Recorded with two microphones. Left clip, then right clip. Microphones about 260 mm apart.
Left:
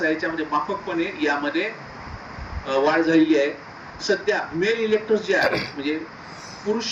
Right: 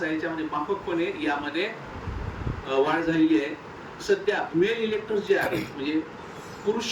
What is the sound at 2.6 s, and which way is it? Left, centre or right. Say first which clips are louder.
Speech: left 4 dB; left.